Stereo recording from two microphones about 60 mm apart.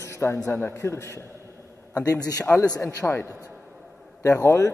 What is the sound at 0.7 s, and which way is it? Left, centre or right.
Speech, left.